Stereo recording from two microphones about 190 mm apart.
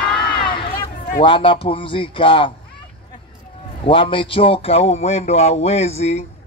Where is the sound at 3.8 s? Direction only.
25° left (ahead or behind).